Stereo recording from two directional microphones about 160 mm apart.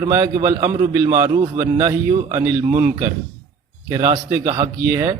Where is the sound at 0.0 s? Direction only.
20° right (ahead or behind).